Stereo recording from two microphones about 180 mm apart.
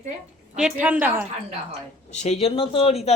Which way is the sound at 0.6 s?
5° right (ahead or behind).